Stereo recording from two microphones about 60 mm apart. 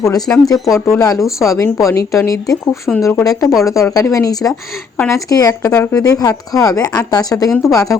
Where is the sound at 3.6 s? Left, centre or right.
Left.